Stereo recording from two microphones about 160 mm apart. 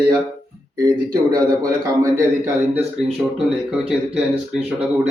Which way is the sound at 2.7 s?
10° right (ahead or behind).